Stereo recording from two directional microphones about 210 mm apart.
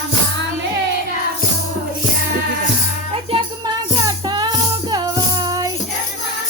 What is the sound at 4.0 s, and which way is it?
Music, 20° right (ahead or behind).